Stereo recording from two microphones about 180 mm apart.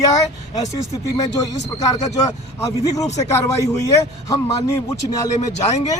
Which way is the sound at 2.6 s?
20° left (ahead or behind).